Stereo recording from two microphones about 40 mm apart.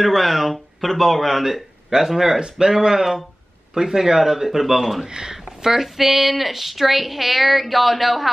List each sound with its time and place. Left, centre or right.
0.0 s speech: centre
1.4 s speech: centre
5.0 s speech: centre
5.3 s speech: centre